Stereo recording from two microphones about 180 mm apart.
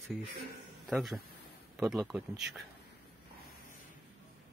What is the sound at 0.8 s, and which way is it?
Speech, centre (ahead or behind).